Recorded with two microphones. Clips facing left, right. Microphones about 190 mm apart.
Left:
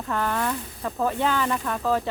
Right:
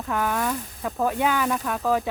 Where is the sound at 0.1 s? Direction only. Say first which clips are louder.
Right 1 dB; 10° right (ahead or behind).